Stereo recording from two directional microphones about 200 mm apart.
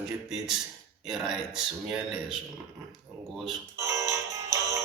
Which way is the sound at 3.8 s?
15° right (ahead or behind).